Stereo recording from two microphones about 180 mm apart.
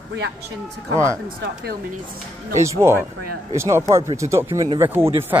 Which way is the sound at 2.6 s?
15° right (ahead or behind).